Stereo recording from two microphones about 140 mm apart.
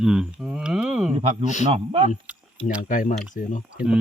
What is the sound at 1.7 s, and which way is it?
Speech, 40° right (ahead or behind).